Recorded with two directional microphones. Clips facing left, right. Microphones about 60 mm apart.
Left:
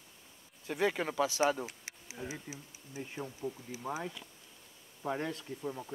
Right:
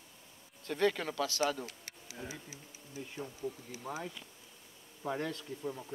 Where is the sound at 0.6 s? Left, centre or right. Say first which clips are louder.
Even; centre.